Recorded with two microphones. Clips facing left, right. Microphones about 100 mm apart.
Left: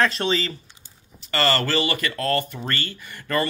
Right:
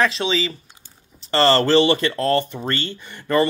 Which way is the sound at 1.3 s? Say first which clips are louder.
Right 7 dB; 30° right (ahead or behind).